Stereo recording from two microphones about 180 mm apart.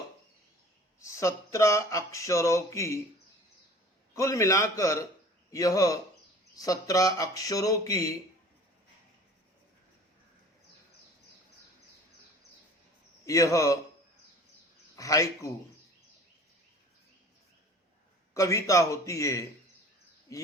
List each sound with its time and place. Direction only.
0.9 s speech: 15° left (ahead or behind)
4.1 s speech: 15° left (ahead or behind)
13.2 s speech: 15° left (ahead or behind)
14.9 s a man's voice: 20° left (ahead or behind)
18.3 s speech: 15° left (ahead or behind)